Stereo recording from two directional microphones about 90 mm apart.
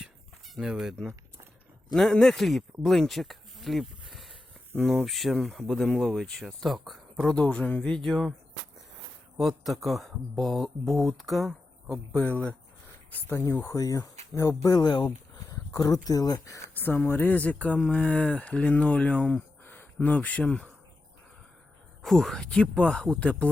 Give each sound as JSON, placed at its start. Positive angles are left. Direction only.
{"t": 0.0, "sound": "a sound", "side_deg": 0}
{"t": 1.9, "sound": "speech", "side_deg": 5}
{"t": 9.4, "sound": "speech", "side_deg": 0}
{"t": 12.1, "sound": "speech", "side_deg": 15}
{"t": 13.2, "sound": "speech", "side_deg": 30}
{"t": 16.7, "sound": "speech", "side_deg": 20}
{"t": 22.0, "sound": "speech", "side_deg": 5}